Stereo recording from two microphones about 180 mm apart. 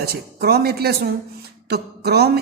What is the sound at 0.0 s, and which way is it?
A woman's voice, 60° right (ahead or behind).